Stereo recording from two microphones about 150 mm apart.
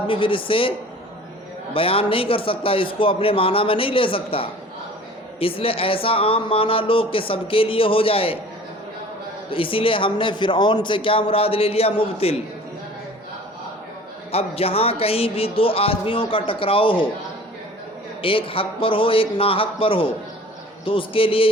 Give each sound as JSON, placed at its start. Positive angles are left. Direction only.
{"t": 0.1, "sound": "speech", "side_deg": 35}
{"t": 1.7, "sound": "speech", "side_deg": 40}
{"t": 9.5, "sound": "speech", "side_deg": 35}
{"t": 14.3, "sound": "speech", "side_deg": 40}
{"t": 18.2, "sound": "speech", "side_deg": 35}